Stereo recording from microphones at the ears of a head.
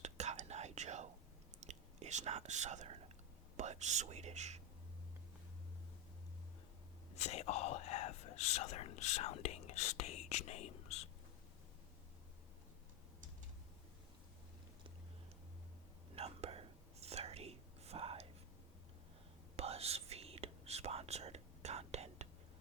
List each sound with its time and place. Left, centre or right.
0.2 s whispering: right
3.6 s speech: right
7.1 s speech: left
16.1 s whispering: right
19.6 s whispering: right